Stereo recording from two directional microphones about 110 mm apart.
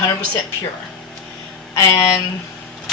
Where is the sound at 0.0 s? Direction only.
35° left (ahead or behind).